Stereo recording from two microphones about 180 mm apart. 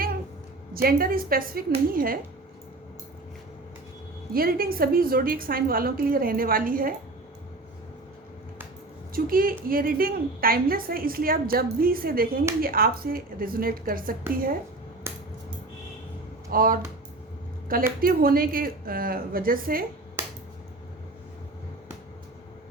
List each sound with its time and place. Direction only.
0.7 s a woman's voice: 55° right (ahead or behind)
4.4 s a woman's voice: 55° right (ahead or behind)
9.1 s a woman's voice: 55° right (ahead or behind)
16.5 s a woman's voice: 50° right (ahead or behind)
18.0 s a woman's voice: 55° right (ahead or behind)